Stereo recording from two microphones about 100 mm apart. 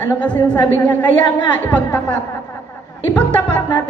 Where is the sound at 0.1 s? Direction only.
15° left (ahead or behind).